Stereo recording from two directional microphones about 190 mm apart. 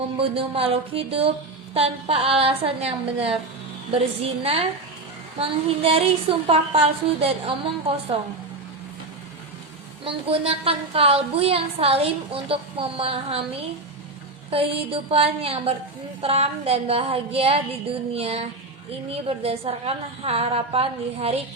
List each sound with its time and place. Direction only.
0.2 s a woman's voice: 30° right (ahead or behind)
10.0 s a woman's voice: 30° right (ahead or behind)
14.5 s a woman's voice: 30° right (ahead or behind)